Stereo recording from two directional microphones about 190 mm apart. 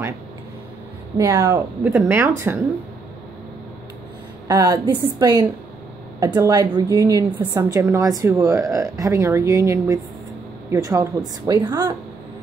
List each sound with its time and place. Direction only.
1.1 s a woman's voice: 15° right (ahead or behind)
4.5 s a woman's voice: 20° right (ahead or behind)